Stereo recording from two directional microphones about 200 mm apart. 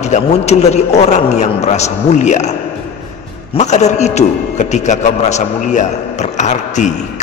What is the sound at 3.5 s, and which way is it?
A man's voice, 35° left (ahead or behind).